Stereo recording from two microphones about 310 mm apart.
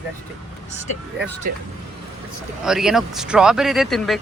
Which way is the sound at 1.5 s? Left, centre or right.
Right.